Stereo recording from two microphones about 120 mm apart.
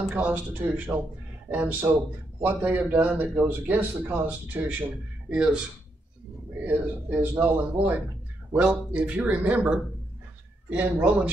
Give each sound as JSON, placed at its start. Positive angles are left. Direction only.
{"t": 0.1, "sound": "a man's voice", "side_deg": -15}
{"t": 6.6, "sound": "a man's voice", "side_deg": -15}
{"t": 8.5, "sound": "a man's voice", "side_deg": -10}